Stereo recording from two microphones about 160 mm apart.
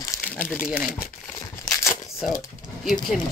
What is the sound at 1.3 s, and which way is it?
Tearing, 15° left (ahead or behind).